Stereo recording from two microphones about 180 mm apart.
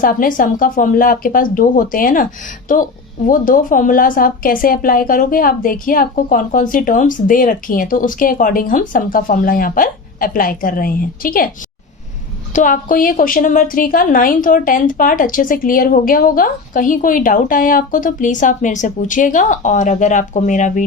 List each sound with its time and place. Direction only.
0.0 s a woman's voice: 50° left (ahead or behind)
3.2 s a woman's voice: 50° left (ahead or behind)
12.5 s a woman's voice: 50° left (ahead or behind)